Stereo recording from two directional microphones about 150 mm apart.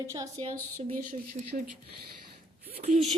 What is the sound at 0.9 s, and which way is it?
Speech, 70° right (ahead or behind).